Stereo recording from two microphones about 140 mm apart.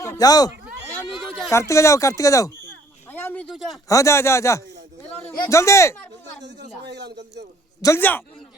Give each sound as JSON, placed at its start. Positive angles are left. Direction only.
{"t": 0.0, "sound": "speech", "side_deg": 25}
{"t": 3.1, "sound": "a sound", "side_deg": 15}
{"t": 3.4, "sound": "a man's voice", "side_deg": 0}
{"t": 3.8, "sound": "speech", "side_deg": 20}
{"t": 7.8, "sound": "a man's voice", "side_deg": 25}